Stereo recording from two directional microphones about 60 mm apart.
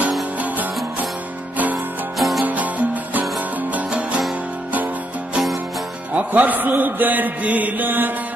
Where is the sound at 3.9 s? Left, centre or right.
Centre.